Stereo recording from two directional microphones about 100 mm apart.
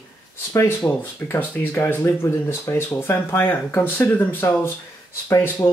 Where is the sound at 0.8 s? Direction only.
20° left (ahead or behind).